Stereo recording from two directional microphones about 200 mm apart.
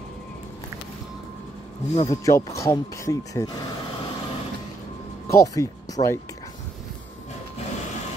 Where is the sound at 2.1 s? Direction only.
15° left (ahead or behind).